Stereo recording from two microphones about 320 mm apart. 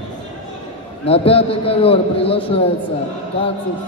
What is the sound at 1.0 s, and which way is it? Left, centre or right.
A woman's voice, centre.